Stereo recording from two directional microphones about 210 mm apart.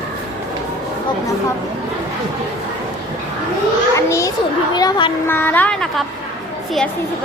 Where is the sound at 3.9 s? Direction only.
15° left (ahead or behind).